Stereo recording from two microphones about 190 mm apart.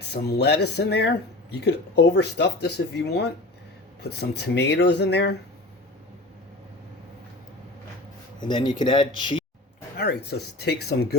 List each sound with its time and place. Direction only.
0.1 s speech: 60° left (ahead or behind)
8.4 s speech: 25° left (ahead or behind)
10.0 s speech: 60° left (ahead or behind)